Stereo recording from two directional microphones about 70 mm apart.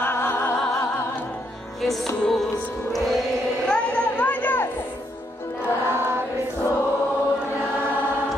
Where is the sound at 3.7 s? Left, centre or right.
Centre.